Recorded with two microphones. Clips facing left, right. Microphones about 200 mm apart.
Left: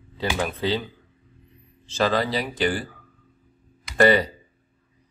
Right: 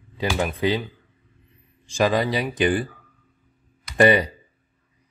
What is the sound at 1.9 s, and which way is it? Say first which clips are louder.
A man's voice: right 2 dB; 15° right (ahead or behind).